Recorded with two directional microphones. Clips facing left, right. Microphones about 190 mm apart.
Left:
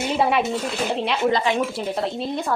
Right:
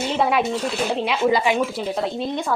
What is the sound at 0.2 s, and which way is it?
Speech, centre (ahead or behind).